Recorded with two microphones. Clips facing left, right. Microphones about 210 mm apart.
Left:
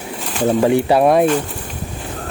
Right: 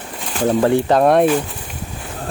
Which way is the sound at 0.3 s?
10° left (ahead or behind).